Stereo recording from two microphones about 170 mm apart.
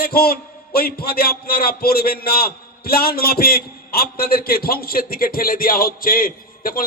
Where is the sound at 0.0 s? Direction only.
65° left (ahead or behind).